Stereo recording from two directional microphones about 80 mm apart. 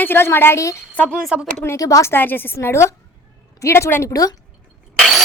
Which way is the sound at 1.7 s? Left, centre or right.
Left.